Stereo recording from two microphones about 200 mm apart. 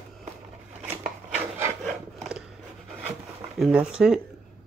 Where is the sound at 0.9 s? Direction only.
35° right (ahead or behind).